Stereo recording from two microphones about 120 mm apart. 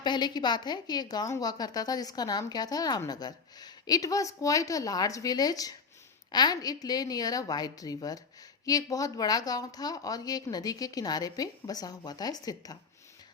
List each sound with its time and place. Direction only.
0.0 s a woman's voice: 40° left (ahead or behind)